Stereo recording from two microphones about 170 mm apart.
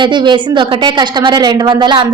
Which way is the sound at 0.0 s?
25° right (ahead or behind).